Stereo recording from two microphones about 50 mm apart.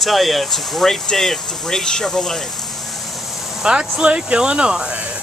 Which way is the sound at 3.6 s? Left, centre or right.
Centre.